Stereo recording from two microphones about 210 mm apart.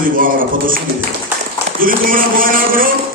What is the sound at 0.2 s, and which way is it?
Speech, 40° right (ahead or behind).